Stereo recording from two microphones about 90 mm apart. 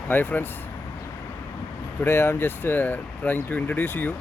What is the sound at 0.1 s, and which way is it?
Speech, 20° left (ahead or behind).